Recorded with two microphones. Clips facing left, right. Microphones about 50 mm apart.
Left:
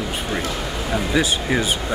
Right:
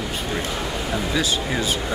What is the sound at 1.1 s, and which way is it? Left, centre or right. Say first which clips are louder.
Speech: left 5 dB; left.